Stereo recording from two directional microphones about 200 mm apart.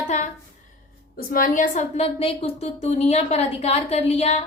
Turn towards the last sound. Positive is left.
turn(degrees=30)  # may be behind; listen again after turning